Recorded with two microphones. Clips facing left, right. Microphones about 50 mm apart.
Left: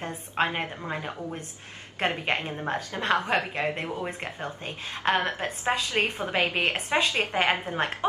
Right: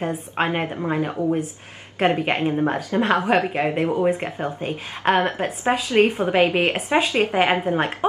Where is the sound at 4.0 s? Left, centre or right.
Centre.